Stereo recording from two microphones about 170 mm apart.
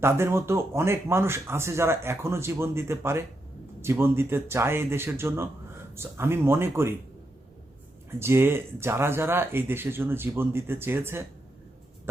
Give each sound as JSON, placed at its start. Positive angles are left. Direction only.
{"t": 0.0, "sound": "speech", "side_deg": -15}
{"t": 8.2, "sound": "speech", "side_deg": -15}